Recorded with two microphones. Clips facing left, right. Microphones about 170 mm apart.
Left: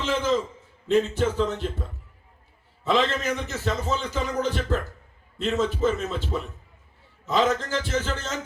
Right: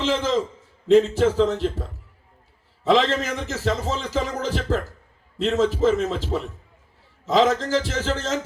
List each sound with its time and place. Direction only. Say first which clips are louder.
0.0 s a man's voice: right 2 dB; 90° right
2.8 s a man's voice: right 4 dB; 90° right